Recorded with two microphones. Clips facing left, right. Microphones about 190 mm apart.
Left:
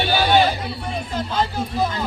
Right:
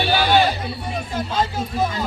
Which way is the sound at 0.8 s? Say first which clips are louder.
Even; 10° right (ahead or behind).